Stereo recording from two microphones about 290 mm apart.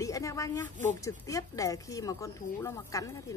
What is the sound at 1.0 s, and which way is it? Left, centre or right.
Speech, centre.